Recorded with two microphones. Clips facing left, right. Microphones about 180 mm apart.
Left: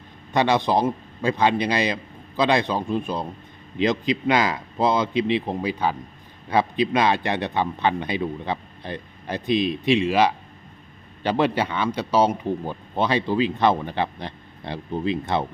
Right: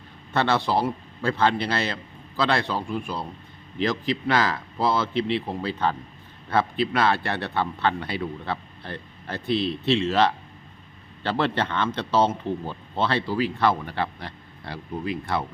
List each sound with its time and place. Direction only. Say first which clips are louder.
0.3 s a man's voice: left 3 dB; 15° left (ahead or behind)